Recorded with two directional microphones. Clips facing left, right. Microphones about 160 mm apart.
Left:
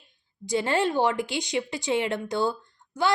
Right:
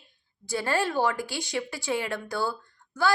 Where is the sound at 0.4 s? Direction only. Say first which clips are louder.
Left 3 dB; 20° left (ahead or behind).